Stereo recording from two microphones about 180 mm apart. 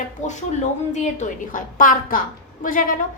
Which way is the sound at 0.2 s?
45° left (ahead or behind).